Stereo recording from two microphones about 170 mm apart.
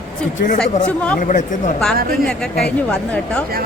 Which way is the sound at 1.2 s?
50° left (ahead or behind).